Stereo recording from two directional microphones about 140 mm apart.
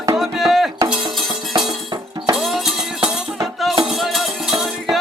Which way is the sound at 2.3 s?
Centre (ahead or behind).